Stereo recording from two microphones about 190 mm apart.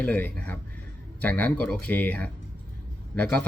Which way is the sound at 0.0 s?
10° left (ahead or behind).